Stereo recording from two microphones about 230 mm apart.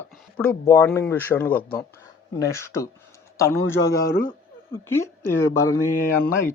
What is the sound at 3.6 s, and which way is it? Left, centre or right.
Speech, left.